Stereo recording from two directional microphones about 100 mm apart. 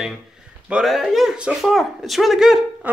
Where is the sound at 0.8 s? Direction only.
Centre (ahead or behind).